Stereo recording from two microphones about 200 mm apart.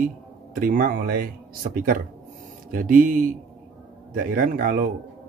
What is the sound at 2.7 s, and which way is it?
Speech, 45° right (ahead or behind).